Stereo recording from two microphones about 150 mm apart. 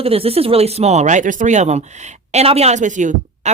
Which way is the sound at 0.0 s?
40° right (ahead or behind).